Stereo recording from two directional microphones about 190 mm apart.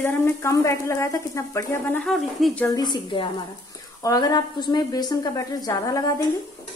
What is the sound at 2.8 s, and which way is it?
A woman's voice, 25° left (ahead or behind).